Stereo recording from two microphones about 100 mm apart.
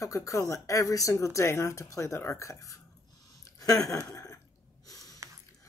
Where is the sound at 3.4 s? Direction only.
35° left (ahead or behind).